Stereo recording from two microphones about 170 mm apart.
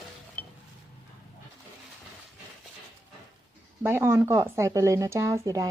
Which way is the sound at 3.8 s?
15° right (ahead or behind).